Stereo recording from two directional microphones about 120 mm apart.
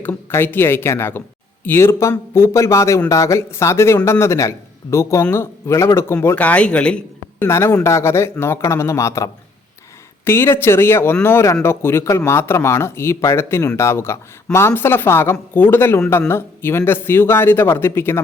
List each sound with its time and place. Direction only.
0.0 s speech: 20° left (ahead or behind)
7.4 s speech: 20° left (ahead or behind)